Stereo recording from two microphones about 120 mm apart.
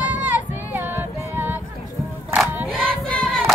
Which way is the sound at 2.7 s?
5° left (ahead or behind).